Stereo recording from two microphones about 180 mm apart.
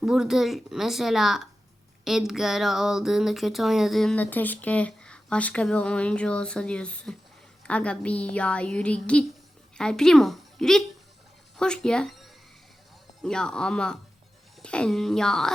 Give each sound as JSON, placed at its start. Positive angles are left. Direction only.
{"t": 0.0, "sound": "a woman's voice", "side_deg": -5}